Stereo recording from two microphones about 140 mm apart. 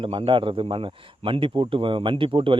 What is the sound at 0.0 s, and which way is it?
Speech, 40° right (ahead or behind).